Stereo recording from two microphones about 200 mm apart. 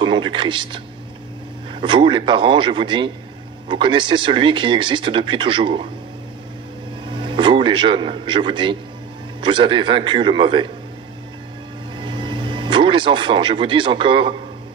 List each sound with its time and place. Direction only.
0.0 s speech: 25° right (ahead or behind)
7.2 s speech: 25° right (ahead or behind)
12.0 s music: 25° right (ahead or behind)